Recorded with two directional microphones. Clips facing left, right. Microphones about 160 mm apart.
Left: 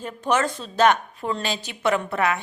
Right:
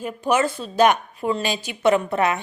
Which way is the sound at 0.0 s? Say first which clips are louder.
Right 2 dB; 10° right (ahead or behind).